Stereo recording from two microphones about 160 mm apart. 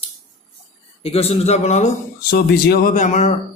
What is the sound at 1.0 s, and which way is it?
Speech, 40° left (ahead or behind).